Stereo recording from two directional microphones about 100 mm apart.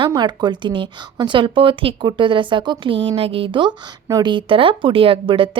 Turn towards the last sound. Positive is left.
turn(degrees=-60)  # may be behind; listen again after turning